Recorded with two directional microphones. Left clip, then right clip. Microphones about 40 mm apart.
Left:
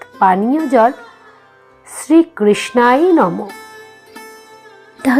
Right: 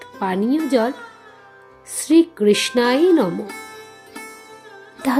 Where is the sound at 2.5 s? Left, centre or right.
Right.